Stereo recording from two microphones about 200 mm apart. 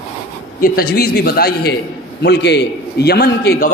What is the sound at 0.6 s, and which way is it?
A man's voice, 50° left (ahead or behind).